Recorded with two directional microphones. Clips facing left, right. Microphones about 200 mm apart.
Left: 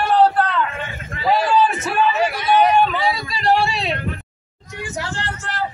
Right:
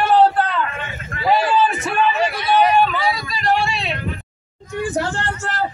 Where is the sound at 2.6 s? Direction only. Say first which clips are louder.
Right 1 dB; 20° left (ahead or behind).